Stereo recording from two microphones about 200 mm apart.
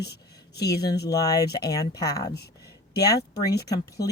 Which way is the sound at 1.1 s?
20° left (ahead or behind).